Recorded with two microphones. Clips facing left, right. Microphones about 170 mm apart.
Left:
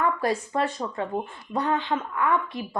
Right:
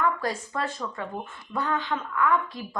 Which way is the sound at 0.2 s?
30° left (ahead or behind).